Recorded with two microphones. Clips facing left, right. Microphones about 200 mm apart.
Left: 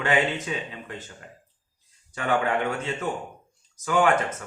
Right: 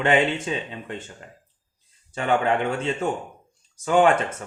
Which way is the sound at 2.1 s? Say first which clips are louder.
Right 3 dB; 25° right (ahead or behind).